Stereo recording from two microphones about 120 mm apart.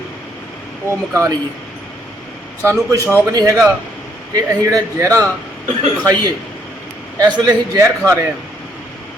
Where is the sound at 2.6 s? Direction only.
25° right (ahead or behind).